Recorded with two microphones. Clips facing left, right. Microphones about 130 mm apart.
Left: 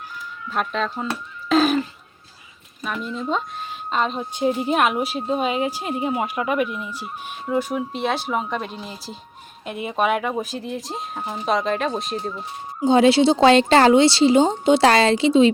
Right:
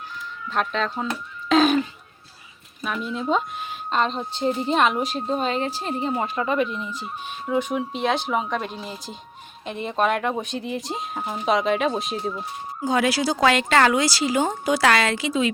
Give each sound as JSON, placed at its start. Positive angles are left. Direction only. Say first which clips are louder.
{"t": 0.5, "sound": "speech", "louder": "even", "side_deg": 5}
{"t": 1.5, "sound": "a sound", "louder": "even", "side_deg": 0}
{"t": 2.8, "sound": "a woman's voice", "louder": "right 1 dB", "side_deg": 0}
{"t": 12.8, "sound": "speech", "louder": "left 7 dB", "side_deg": 25}